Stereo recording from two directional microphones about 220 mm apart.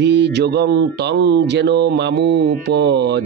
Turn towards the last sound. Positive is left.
turn(degrees=-50)  # may be behind; listen again after turning